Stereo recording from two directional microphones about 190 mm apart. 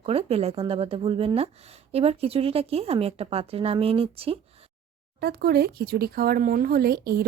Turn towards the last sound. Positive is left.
turn(degrees=-50)  # may be behind; listen again after turning